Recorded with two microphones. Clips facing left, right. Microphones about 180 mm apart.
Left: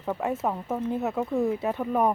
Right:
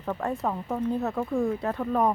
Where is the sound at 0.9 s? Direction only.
20° left (ahead or behind).